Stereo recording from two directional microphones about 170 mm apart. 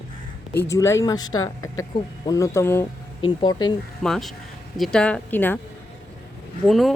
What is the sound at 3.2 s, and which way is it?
Speech, 25° left (ahead or behind).